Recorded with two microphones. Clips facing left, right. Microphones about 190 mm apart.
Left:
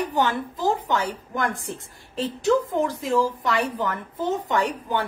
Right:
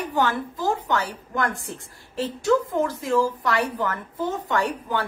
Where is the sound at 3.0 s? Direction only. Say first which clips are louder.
Even; 20° left (ahead or behind).